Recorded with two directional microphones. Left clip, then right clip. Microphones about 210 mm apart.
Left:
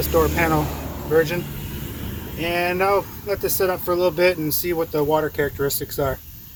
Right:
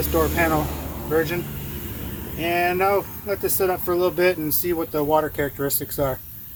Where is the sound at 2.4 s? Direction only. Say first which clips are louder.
Even; 30° right (ahead or behind).